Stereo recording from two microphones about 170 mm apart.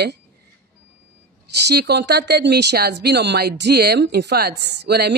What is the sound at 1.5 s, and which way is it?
Speech, 75° right (ahead or behind).